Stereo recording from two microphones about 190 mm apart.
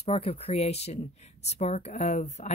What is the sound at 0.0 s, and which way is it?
Speech, 30° left (ahead or behind).